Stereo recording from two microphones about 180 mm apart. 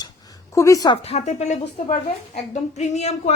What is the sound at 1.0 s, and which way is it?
A woman's voice, 35° left (ahead or behind).